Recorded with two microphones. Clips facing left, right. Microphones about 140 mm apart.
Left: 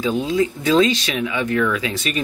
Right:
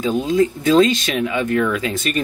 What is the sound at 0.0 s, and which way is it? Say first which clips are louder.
Speech: right 2 dB; 45° right (ahead or behind).